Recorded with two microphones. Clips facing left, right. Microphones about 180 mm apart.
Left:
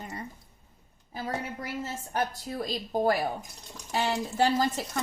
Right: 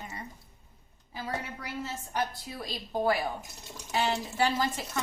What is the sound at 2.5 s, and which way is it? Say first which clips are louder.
A woman's voice: left 5 dB; 45° left (ahead or behind).